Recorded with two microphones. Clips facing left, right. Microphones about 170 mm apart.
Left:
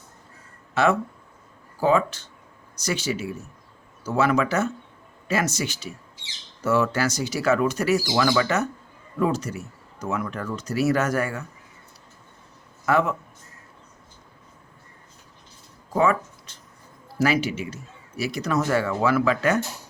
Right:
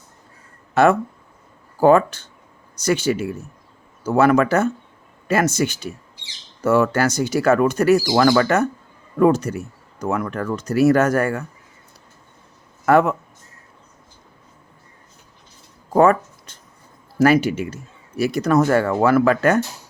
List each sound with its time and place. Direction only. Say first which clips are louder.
0.7 s speech: right 6 dB; 50° right (ahead or behind)
12.8 s a man's voice: right 6 dB; 55° right (ahead or behind)
15.9 s a sound: right 7 dB; 50° right (ahead or behind)
17.2 s speech: right 7 dB; 50° right (ahead or behind)